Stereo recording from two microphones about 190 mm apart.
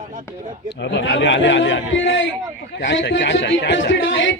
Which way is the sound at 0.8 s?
65° left (ahead or behind).